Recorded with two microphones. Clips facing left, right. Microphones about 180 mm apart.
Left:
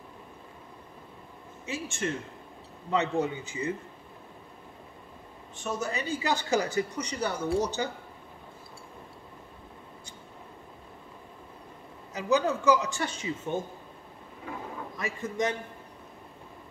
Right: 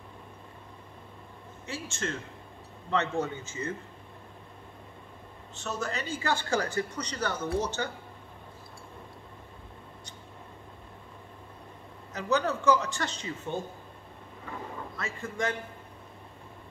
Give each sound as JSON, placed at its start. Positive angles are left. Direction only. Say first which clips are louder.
{"t": 1.7, "sound": "speech", "louder": "left 3 dB", "side_deg": 15}
{"t": 5.6, "sound": "speech", "louder": "left 2 dB", "side_deg": 15}
{"t": 12.1, "sound": "speech", "louder": "left 2 dB", "side_deg": 10}
{"t": 15.0, "sound": "speech", "louder": "left 3 dB", "side_deg": 15}